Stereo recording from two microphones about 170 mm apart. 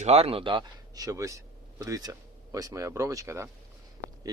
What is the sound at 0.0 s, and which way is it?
Speech, 40° right (ahead or behind).